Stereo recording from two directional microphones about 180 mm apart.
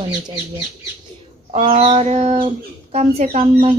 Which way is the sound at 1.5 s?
35° right (ahead or behind).